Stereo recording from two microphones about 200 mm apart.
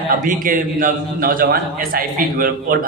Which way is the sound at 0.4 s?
45° right (ahead or behind).